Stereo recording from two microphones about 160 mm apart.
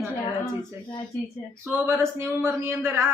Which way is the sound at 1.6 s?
15° right (ahead or behind).